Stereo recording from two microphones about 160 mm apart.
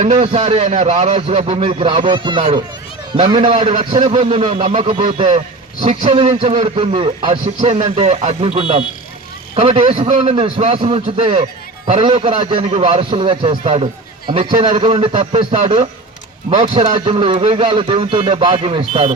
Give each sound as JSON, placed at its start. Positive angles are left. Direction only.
{"t": 0.0, "sound": "a man's voice", "side_deg": -50}
{"t": 3.8, "sound": "a man's voice", "side_deg": -50}
{"t": 6.9, "sound": "speech", "side_deg": -30}
{"t": 7.4, "sound": "a man's voice", "side_deg": -50}
{"t": 12.4, "sound": "a man's voice", "side_deg": -30}
{"t": 12.7, "sound": "speech", "side_deg": -40}
{"t": 16.9, "sound": "speech", "side_deg": -30}